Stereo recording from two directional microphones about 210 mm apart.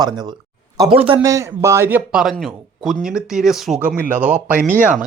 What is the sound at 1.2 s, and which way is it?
A man's voice, 15° right (ahead or behind).